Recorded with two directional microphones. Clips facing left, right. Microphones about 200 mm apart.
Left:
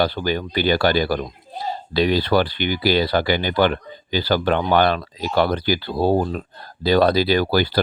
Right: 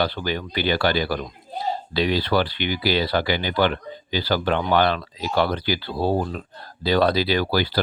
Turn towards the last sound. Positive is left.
turn(degrees=45)  # may be behind; listen again after turning